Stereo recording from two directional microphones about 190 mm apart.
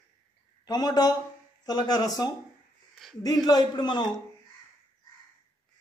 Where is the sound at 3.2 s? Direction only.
20° left (ahead or behind).